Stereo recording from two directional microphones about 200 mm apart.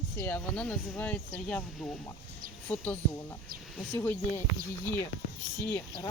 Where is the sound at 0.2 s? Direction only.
10° left (ahead or behind).